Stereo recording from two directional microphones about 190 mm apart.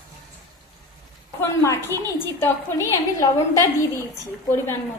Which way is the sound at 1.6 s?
15° left (ahead or behind).